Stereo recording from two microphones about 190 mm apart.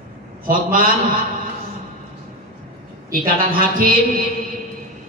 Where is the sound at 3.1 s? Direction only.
50° right (ahead or behind).